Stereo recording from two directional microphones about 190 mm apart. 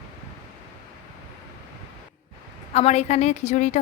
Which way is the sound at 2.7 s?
35° left (ahead or behind).